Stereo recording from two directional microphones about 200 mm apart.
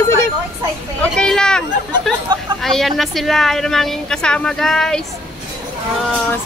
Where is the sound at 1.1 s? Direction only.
5° left (ahead or behind).